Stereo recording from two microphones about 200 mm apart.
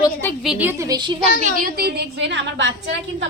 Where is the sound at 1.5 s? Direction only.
50° right (ahead or behind); by 2.7 s 65° right (ahead or behind).